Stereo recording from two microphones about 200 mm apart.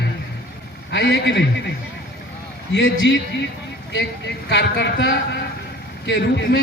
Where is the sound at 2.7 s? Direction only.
65° left (ahead or behind).